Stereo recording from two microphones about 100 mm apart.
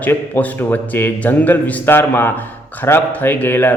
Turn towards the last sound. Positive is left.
turn(degrees=20)  # may be behind; listen again after turning